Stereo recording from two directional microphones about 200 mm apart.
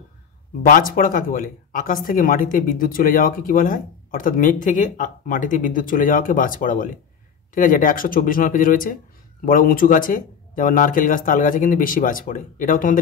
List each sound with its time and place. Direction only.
0.6 s speech: 45° left (ahead or behind)